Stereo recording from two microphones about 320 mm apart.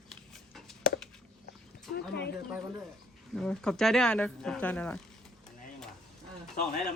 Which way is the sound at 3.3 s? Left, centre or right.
Centre.